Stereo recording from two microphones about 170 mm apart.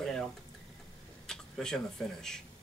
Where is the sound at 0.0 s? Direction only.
5° left (ahead or behind).